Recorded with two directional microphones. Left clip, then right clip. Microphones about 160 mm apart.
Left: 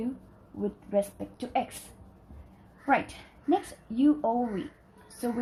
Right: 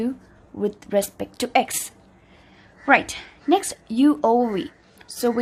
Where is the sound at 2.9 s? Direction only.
35° right (ahead or behind).